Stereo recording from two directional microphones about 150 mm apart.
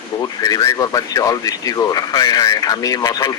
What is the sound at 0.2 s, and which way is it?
Speech, 25° left (ahead or behind).